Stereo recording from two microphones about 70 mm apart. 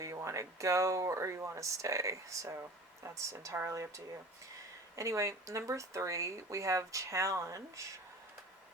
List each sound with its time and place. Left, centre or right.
0.0 s speech: right